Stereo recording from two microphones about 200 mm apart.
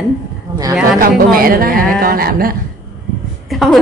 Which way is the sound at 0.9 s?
45° right (ahead or behind).